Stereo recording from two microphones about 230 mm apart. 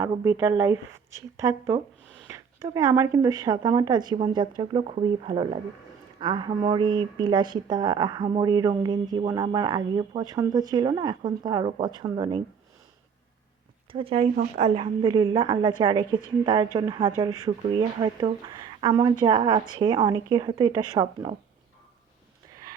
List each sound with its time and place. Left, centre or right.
0.0 s speech: centre
13.9 s speech: right